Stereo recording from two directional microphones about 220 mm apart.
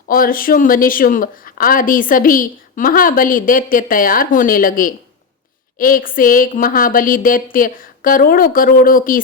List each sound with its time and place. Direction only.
0.1 s speech: 40° left (ahead or behind)